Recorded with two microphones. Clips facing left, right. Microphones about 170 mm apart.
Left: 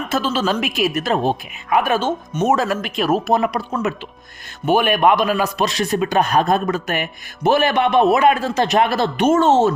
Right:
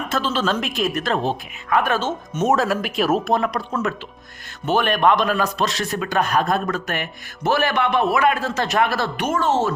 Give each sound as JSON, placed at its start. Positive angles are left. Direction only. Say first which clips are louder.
{"t": 0.1, "sound": "speech", "louder": "left 2 dB", "side_deg": 5}
{"t": 2.3, "sound": "speech", "louder": "even", "side_deg": 0}